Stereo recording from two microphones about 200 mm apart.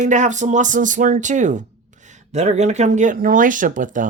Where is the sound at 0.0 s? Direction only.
35° right (ahead or behind).